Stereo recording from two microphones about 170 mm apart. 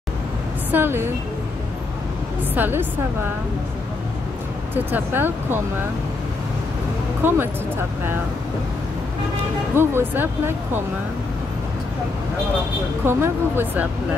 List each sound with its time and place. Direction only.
0.7 s a woman's voice: 10° right (ahead or behind)
2.5 s speech: 10° right (ahead or behind)
4.7 s speech: 10° right (ahead or behind)
7.2 s speech: 10° right (ahead or behind)
9.8 s speech: 10° right (ahead or behind)
13.0 s speech: 15° right (ahead or behind)